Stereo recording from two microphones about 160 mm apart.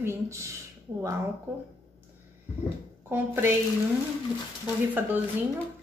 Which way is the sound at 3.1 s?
15° right (ahead or behind).